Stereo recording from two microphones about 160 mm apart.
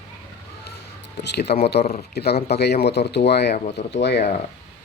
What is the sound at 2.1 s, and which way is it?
Speech, 90° left.